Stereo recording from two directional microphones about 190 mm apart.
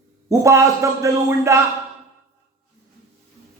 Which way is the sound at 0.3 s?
15° right (ahead or behind).